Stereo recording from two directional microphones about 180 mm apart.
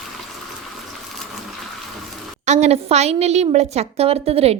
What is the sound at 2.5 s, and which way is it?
A woman's voice, 40° right (ahead or behind).